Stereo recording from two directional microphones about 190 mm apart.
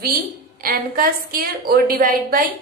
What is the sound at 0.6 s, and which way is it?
A woman's voice, 50° right (ahead or behind).